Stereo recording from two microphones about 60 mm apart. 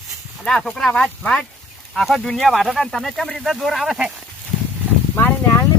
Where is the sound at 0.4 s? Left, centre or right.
Centre.